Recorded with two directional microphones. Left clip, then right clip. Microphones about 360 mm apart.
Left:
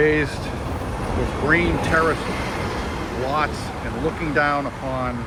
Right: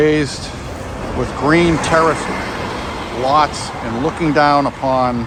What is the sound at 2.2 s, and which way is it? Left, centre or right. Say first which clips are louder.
Vehicle: right 4 dB; right.